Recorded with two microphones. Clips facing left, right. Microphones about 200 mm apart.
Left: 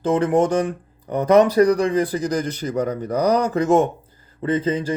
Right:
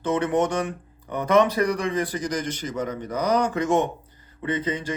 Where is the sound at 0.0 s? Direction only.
30° left (ahead or behind).